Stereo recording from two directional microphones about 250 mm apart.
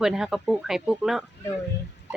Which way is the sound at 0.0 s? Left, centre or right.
Centre.